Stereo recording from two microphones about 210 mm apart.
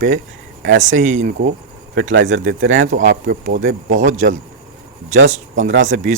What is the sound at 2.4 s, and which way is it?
Speech, 65° right (ahead or behind).